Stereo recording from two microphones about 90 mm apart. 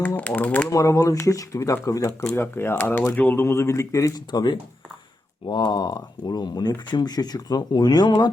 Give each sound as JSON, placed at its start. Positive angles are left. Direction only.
{"t": 0.2, "sound": "speech", "side_deg": 15}
{"t": 0.7, "sound": "speech", "side_deg": 40}
{"t": 3.4, "sound": "speech", "side_deg": 30}
{"t": 4.3, "sound": "speech", "side_deg": 55}